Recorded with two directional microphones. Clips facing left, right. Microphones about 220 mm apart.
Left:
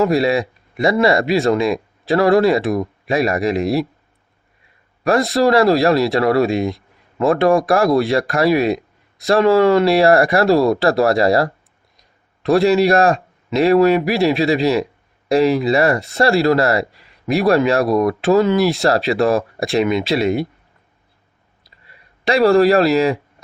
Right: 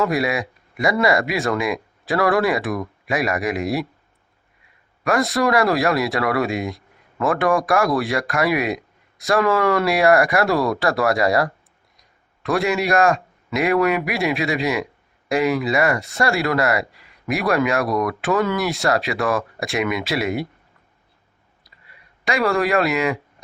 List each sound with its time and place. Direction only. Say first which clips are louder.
0.0 s speech: left 5 dB; 25° left (ahead or behind)
5.0 s a man's voice: left 4 dB; 25° left (ahead or behind)
22.3 s a man's voice: left 7 dB; 30° left (ahead or behind)